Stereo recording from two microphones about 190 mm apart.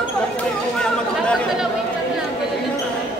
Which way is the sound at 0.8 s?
5° left (ahead or behind).